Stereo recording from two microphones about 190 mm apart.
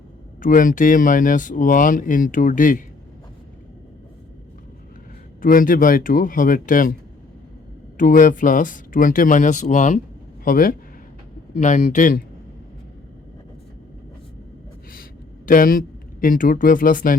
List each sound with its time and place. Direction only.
0.4 s speech: 45° left (ahead or behind)
5.4 s speech: 45° left (ahead or behind)
7.9 s speech: 45° left (ahead or behind)
15.4 s speech: 50° left (ahead or behind)